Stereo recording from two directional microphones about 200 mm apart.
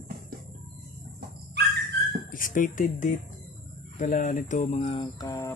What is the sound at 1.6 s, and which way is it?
Dog, 55° right (ahead or behind).